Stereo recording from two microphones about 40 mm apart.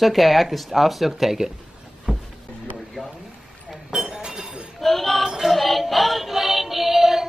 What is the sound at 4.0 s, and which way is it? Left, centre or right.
Chink, centre.